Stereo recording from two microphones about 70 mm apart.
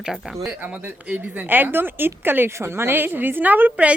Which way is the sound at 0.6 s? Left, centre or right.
Right.